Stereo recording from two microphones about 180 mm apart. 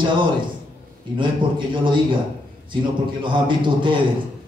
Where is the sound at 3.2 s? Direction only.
25° right (ahead or behind).